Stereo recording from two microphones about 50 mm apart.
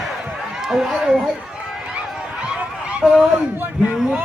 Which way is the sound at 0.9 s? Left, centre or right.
Centre.